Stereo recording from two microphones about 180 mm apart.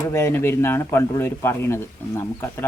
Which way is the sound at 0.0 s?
15° left (ahead or behind).